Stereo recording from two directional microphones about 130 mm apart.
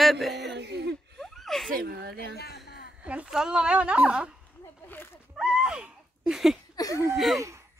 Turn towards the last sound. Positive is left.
turn(degrees=0)  # may be behind; listen again after turning